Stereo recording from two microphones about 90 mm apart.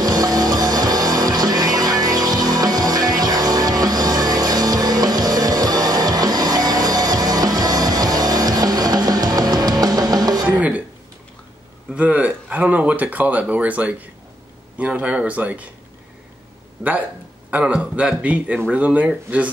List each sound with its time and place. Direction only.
0.0 s music: 45° right (ahead or behind)
11.9 s a sound: 15° right (ahead or behind)
14.8 s speech: 15° right (ahead or behind)
16.8 s speech: 5° right (ahead or behind)